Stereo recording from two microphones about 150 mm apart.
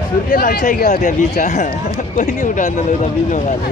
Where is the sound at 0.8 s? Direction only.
55° left (ahead or behind).